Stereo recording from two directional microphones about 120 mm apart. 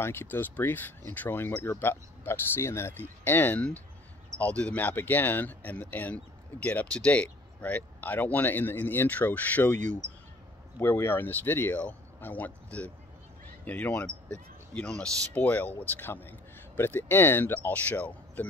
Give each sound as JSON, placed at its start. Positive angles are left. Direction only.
{"t": 0.0, "sound": "speech", "side_deg": 20}
{"t": 10.8, "sound": "speech", "side_deg": 20}